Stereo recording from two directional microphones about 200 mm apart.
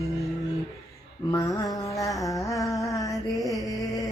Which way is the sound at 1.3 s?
20° left (ahead or behind).